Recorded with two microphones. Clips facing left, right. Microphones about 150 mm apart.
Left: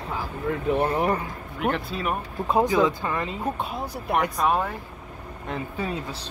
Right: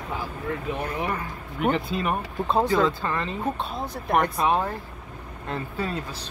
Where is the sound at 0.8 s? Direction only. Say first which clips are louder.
Left 5 dB; 30° left (ahead or behind).